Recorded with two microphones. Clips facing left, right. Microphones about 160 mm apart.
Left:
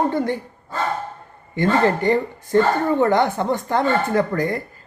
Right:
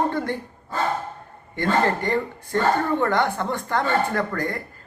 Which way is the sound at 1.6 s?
20° left (ahead or behind).